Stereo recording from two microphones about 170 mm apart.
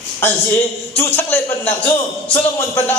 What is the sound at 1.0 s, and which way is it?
Speech, 10° left (ahead or behind).